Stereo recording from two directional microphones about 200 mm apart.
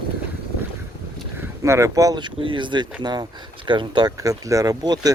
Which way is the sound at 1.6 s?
15° right (ahead or behind).